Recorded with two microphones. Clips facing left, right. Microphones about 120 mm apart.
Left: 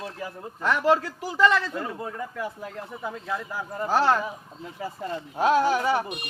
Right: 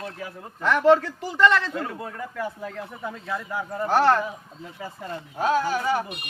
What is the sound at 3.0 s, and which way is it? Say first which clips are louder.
Speech: left 1 dB; 5° left (ahead or behind).